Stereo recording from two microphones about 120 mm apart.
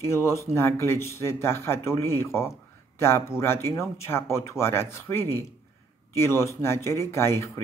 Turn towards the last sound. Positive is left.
turn(degrees=20)  # may be behind; listen again after turning